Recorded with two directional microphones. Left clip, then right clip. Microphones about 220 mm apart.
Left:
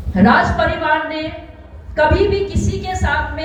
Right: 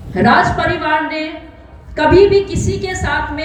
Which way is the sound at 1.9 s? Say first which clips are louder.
Right 5 dB; 50° right (ahead or behind).